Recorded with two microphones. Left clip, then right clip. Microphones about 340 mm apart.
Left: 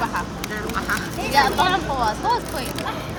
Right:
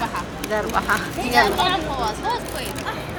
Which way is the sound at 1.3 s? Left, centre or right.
Left.